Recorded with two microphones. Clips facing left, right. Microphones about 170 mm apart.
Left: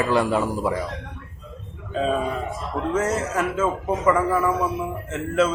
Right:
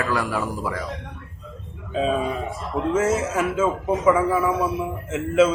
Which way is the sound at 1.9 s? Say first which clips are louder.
Right 1 dB; 5° right (ahead or behind).